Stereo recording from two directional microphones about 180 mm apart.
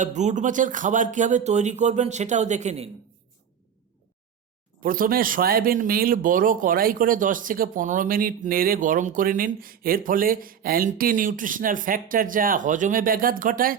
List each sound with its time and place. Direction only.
0.0 s speech: 40° right (ahead or behind)
4.8 s speech: 50° right (ahead or behind)